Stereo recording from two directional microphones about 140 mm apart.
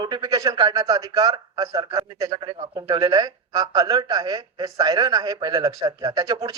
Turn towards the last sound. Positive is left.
turn(degrees=-25)  # may be behind; listen again after turning